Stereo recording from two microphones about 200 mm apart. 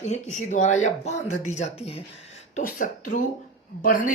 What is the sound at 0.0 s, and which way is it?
Speech, 35° left (ahead or behind).